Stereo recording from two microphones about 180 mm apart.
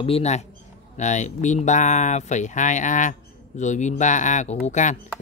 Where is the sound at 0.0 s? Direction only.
35° left (ahead or behind).